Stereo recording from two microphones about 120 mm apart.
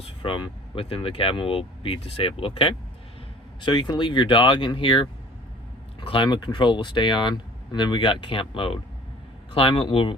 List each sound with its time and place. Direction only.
0.0 s speech: 45° left (ahead or behind)